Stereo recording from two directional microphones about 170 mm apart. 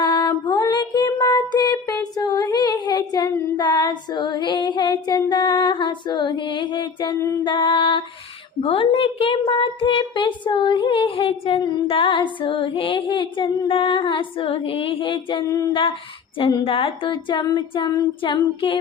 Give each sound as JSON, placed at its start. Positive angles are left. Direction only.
{"t": 0.0, "sound": "music", "side_deg": 25}
{"t": 8.6, "sound": "a woman's voice", "side_deg": 30}